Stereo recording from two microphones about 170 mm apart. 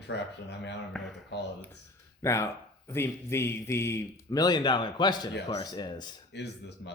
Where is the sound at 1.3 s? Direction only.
90° left.